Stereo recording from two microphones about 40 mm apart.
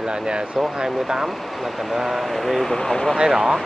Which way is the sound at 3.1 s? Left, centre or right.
Centre.